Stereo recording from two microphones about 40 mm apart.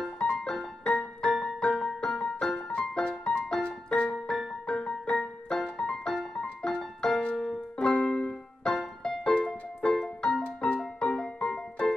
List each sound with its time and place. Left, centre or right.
0.2 s music: left
6.4 s piano: left
7.0 s music: centre
7.8 s music: left
8.3 s music: centre
10.4 s music: left
10.8 s music: left